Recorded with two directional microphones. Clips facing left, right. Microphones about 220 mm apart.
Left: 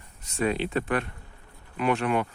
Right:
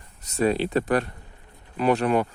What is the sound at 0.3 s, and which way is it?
Speech, 40° right (ahead or behind).